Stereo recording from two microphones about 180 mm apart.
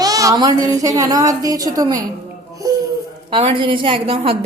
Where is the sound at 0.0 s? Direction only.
20° right (ahead or behind).